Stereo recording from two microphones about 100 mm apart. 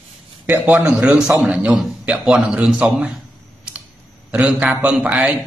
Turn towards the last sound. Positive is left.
turn(degrees=-10)  # may be behind; listen again after turning